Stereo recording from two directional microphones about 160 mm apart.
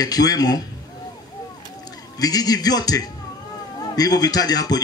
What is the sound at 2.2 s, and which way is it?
Speech, 25° left (ahead or behind).